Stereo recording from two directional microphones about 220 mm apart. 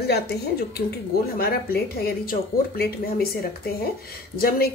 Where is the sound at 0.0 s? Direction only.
50° left (ahead or behind).